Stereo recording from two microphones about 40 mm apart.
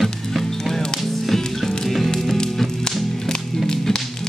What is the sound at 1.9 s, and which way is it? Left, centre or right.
Music, centre.